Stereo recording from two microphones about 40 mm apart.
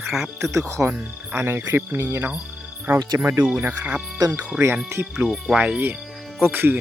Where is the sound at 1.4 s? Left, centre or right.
Right.